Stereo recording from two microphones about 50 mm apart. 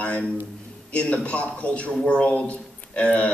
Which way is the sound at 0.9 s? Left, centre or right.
Left.